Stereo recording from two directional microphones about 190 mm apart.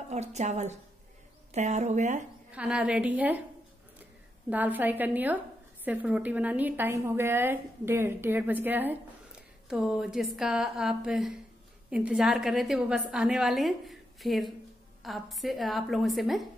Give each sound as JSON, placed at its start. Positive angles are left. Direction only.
{"t": 0.1, "sound": "speech", "side_deg": -35}
{"t": 2.5, "sound": "a woman's voice", "side_deg": -5}
{"t": 4.5, "sound": "a woman's voice", "side_deg": -10}